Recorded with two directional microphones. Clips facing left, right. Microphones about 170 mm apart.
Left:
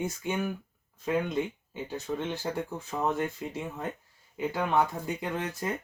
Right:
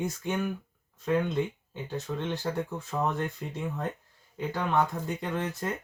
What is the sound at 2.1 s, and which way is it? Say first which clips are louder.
Speech: even; 20° left (ahead or behind).